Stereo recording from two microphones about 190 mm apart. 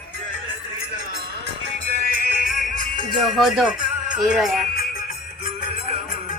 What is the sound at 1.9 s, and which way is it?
Music, 45° left (ahead or behind).